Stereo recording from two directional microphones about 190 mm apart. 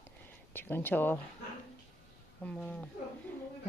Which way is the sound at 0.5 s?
10° left (ahead or behind).